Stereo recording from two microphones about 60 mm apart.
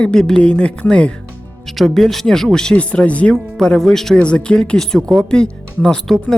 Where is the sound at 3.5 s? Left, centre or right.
Centre.